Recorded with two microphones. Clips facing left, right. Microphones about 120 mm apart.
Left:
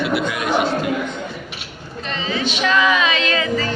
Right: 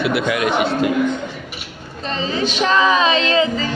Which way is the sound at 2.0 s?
35° right (ahead or behind).